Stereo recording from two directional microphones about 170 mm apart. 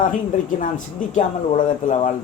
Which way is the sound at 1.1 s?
50° left (ahead or behind).